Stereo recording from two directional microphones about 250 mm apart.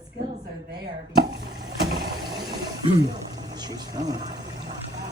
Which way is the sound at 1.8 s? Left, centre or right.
Right.